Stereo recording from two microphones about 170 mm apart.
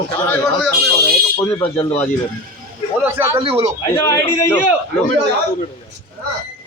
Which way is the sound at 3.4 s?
35° right (ahead or behind).